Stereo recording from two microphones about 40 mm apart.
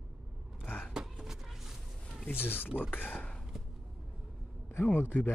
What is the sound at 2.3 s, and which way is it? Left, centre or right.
Speech, left.